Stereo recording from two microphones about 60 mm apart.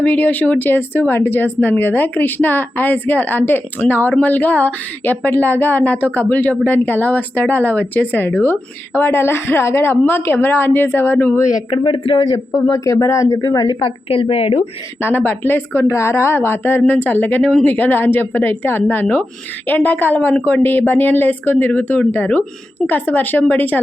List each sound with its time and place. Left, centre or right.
0.0 s speech: left
11.3 s speech: left
15.0 s speech: left